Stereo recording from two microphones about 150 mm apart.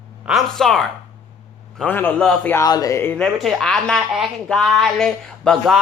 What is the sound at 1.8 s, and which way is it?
Speech, 10° left (ahead or behind).